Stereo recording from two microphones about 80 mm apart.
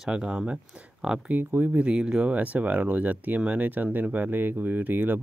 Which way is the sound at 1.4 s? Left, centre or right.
Right.